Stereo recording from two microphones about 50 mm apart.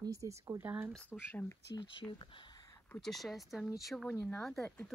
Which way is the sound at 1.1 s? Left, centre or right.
Centre.